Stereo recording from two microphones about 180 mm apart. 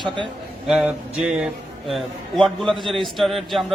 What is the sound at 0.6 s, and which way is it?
A man's voice, 5° right (ahead or behind).